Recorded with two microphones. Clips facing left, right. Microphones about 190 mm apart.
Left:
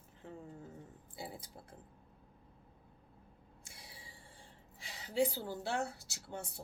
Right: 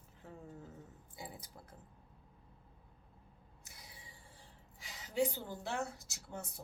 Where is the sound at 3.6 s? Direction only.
30° left (ahead or behind).